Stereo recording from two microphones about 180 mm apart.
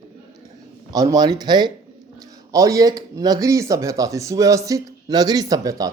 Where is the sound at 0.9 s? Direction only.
20° right (ahead or behind).